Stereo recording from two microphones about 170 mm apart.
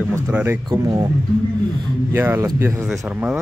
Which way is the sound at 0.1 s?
10° right (ahead or behind).